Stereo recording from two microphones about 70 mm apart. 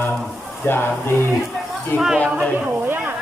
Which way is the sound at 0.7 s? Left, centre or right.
Left.